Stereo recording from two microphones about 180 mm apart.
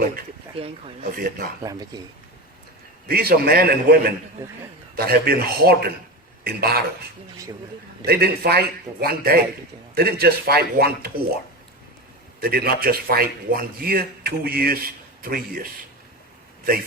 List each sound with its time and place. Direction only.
0.5 s speech: 30° right (ahead or behind)
1.1 s speech: 50° right (ahead or behind)
1.6 s speech: 20° right (ahead or behind)
3.1 s speech: 55° right (ahead or behind)
8.0 s speech: 60° right (ahead or behind)
12.4 s speech: 60° right (ahead or behind)